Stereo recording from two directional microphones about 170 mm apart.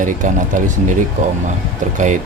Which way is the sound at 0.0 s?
50° right (ahead or behind).